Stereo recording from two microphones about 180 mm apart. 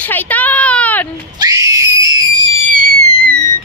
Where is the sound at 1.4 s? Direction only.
20° right (ahead or behind).